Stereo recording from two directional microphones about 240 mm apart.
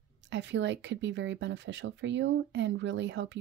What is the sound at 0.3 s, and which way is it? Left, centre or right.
Speech, right.